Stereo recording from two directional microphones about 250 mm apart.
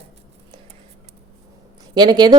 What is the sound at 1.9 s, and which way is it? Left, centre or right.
Speech, centre.